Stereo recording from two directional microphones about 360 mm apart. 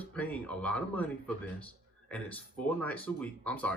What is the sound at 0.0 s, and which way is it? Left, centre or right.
Speech, centre.